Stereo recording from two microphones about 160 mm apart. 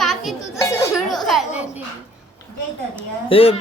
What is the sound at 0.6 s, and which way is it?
Speech, 20° left (ahead or behind).